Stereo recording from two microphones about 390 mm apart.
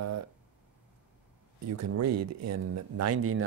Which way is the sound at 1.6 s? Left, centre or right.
Right.